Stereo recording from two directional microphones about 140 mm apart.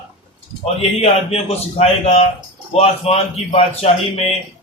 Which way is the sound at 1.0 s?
45° left (ahead or behind).